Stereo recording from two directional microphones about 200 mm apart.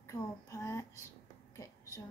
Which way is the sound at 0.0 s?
15° left (ahead or behind).